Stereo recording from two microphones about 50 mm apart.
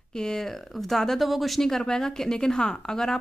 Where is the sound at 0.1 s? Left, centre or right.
Centre.